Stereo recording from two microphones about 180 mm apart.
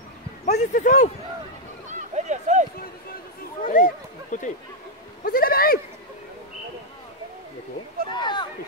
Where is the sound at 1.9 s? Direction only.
40° right (ahead or behind).